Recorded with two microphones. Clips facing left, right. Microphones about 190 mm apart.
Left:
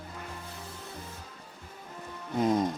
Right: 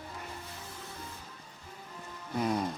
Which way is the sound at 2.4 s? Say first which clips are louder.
Left 5 dB; 20° left (ahead or behind).